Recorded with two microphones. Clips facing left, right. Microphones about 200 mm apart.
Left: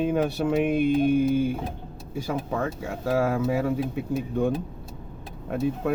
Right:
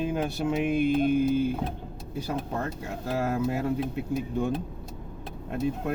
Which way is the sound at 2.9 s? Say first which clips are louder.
Left 5 dB; 65° left (ahead or behind).